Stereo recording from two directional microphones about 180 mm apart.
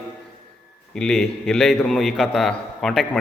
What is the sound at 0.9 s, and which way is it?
A man's voice, centre (ahead or behind).